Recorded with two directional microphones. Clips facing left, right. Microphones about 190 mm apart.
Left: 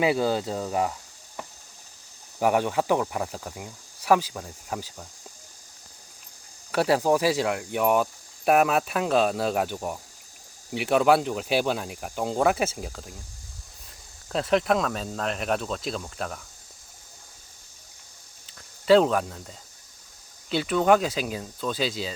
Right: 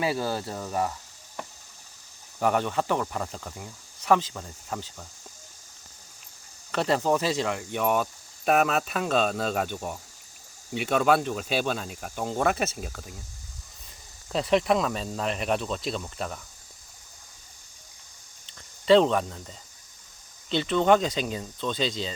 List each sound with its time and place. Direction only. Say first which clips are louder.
0.0 s speech: left 5 dB; 15° left (ahead or behind)
2.4 s speech: left 2 dB; 10° left (ahead or behind)
6.7 s speech: left 3 dB; 10° left (ahead or behind)
14.3 s speech: even; centre (ahead or behind)
18.4 s speech: left 1 dB; 5° left (ahead or behind)